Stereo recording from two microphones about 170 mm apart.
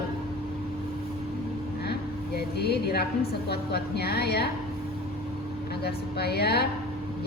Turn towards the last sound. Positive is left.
turn(degrees=70)  # may be behind; listen again after turning